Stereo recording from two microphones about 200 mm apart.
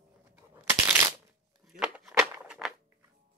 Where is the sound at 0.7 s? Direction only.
10° right (ahead or behind).